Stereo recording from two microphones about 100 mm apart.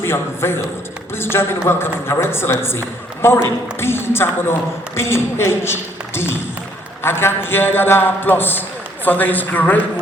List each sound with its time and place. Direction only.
0.0 s a man's voice: 25° left (ahead or behind)